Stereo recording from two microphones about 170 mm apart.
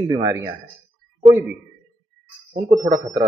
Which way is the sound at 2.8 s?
20° right (ahead or behind).